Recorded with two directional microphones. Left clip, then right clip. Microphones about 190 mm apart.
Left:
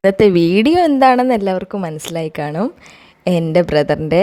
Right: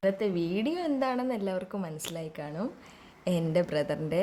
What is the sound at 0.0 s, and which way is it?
A woman's voice, 50° left (ahead or behind).